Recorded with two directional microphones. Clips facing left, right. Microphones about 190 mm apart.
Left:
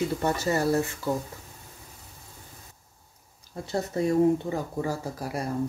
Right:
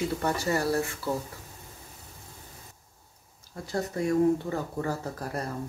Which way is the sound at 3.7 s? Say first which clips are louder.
Left 2 dB; 25° left (ahead or behind).